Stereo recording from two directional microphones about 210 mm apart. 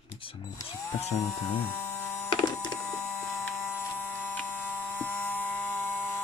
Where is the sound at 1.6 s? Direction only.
10° left (ahead or behind).